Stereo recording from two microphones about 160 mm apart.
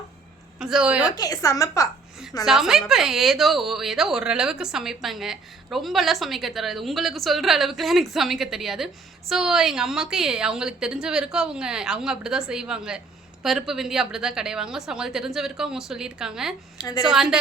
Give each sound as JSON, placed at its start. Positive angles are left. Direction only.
{"t": 0.6, "sound": "a woman's voice", "side_deg": -5}
{"t": 1.1, "sound": "a woman's voice", "side_deg": 25}
{"t": 2.4, "sound": "a woman's voice", "side_deg": 0}
{"t": 16.7, "sound": "a woman's voice", "side_deg": 25}